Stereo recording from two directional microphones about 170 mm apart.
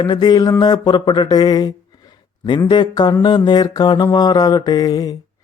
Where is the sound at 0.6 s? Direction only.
25° left (ahead or behind).